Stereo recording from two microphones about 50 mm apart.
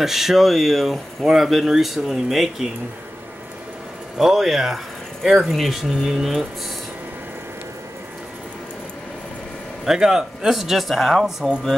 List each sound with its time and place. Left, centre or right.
0.0 s speech: centre
4.2 s speech: centre
9.8 s speech: centre
11.2 s speech: centre